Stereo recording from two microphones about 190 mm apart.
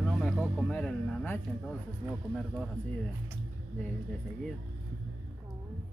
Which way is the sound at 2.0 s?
10° right (ahead or behind).